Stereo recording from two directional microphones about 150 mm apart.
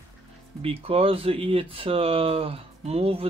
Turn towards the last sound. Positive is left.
turn(degrees=-40)  # may be behind; listen again after turning